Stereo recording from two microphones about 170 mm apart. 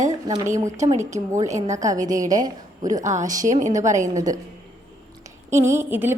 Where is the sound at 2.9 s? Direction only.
45° right (ahead or behind).